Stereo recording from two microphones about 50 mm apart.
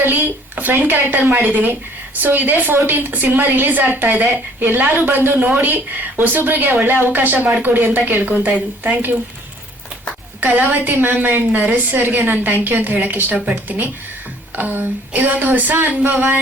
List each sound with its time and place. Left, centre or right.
0.0 s a woman's voice: right
10.4 s a woman's voice: right